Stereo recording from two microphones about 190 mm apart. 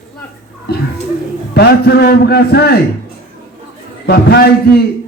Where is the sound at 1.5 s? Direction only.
55° left (ahead or behind).